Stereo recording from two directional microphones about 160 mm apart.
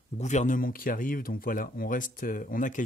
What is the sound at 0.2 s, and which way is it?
Speech, 45° left (ahead or behind).